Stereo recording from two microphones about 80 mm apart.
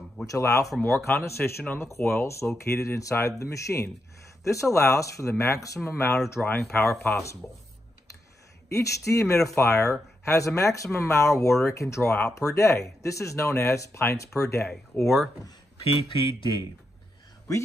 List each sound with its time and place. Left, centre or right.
0.3 s speech: left
0.9 s speech: left
5.9 s speech: left
6.4 s speech: centre
6.8 s speech: left
8.7 s speech: left
14.7 s speech: centre
16.1 s speech: left